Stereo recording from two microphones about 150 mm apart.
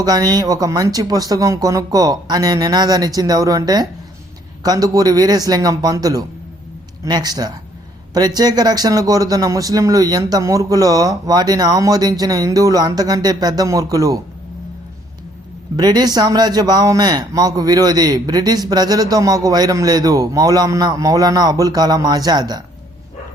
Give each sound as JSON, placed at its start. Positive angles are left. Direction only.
{"t": 0.0, "sound": "a man's voice", "side_deg": -25}
{"t": 15.7, "sound": "a man's voice", "side_deg": -25}